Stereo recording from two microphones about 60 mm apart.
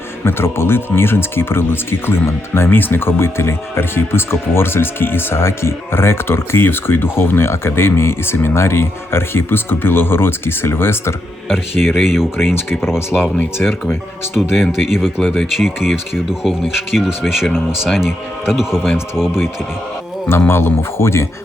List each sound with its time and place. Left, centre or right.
0.3 s speech: left
11.4 s speech: centre
14.8 s speech: centre
15.2 s speech: centre
15.6 s speech: centre
20.5 s speech: left